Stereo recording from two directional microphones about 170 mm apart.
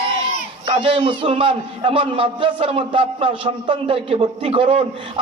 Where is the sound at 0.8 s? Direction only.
30° right (ahead or behind).